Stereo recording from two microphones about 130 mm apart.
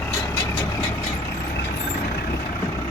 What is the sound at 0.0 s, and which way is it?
Vehicle, 20° left (ahead or behind).